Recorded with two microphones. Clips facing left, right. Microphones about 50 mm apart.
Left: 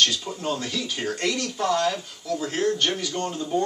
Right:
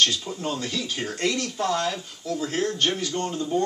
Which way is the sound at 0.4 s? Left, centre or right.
Centre.